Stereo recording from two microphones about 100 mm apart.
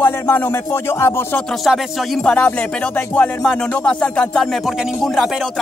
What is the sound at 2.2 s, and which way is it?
Music, 15° left (ahead or behind).